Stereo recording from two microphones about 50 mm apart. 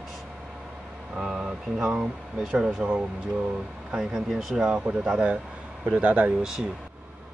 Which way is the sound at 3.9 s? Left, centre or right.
Centre.